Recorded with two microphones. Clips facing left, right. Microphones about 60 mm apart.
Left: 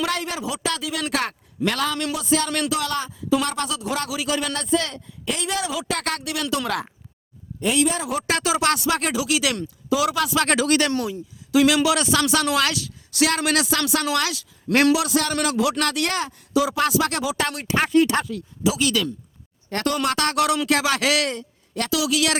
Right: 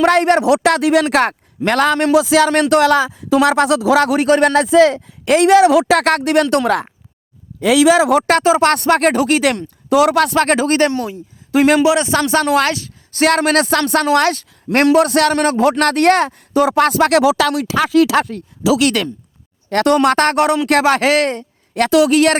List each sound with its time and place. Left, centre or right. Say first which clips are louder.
0.0 s speech: right 14 dB; right
1.1 s a man's voice: right 10 dB; right
2.1 s speech: right 12 dB; right
2.5 s speech: right 12 dB; right
4.2 s speech: right 13 dB; right
4.5 s speech: right 13 dB; right
7.8 s speech: right 14 dB; right
8.4 s a man's voice: right 9 dB; right
8.7 s speech: right 9 dB; right
10.4 s a man's voice: right 6 dB; right
11.8 s a man's voice: right 6 dB; right
18.8 s speech: right 6 dB; right
20.7 s a man's voice: right 8 dB; right
21.8 s speech: right 11 dB; right